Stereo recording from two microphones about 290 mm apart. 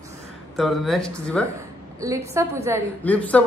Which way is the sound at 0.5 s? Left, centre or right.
Centre.